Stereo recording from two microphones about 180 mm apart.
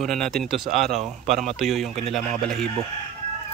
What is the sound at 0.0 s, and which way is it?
Speech, centre (ahead or behind).